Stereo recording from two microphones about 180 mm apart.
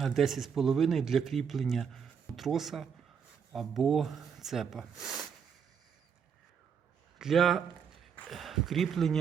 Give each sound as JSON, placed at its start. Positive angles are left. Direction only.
{"t": 0.0, "sound": "speech", "side_deg": 0}
{"t": 7.2, "sound": "speech", "side_deg": 0}